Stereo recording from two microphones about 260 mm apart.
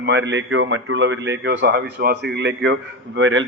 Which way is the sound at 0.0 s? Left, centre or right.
Right.